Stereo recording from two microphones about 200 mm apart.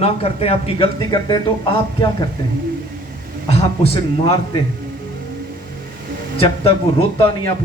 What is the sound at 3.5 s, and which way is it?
Speech, 30° left (ahead or behind).